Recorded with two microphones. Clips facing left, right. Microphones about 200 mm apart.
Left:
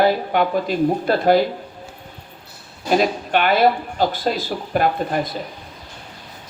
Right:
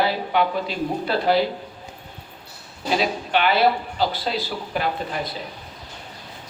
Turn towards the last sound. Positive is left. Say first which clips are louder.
# left 6 dB
turn(degrees=50)  # may be behind; listen again after turning